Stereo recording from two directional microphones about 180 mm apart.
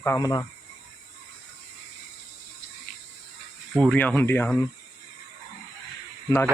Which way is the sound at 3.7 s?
5° left (ahead or behind).